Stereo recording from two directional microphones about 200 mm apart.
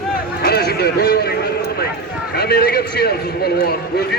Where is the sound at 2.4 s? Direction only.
50° left (ahead or behind).